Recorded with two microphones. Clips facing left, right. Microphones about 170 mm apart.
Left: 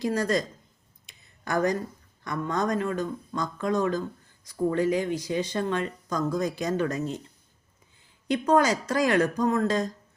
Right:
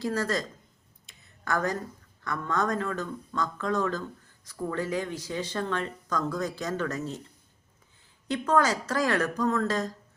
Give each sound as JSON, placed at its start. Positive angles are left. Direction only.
{"t": 0.0, "sound": "speech", "side_deg": 15}
{"t": 1.0, "sound": "a sound", "side_deg": 15}
{"t": 2.2, "sound": "speech", "side_deg": 15}
{"t": 8.3, "sound": "speech", "side_deg": 15}